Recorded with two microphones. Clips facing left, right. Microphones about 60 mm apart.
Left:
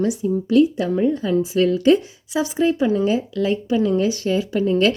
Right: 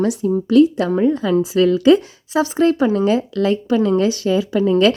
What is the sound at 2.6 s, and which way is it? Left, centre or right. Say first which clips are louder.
Speech: right 3 dB; right.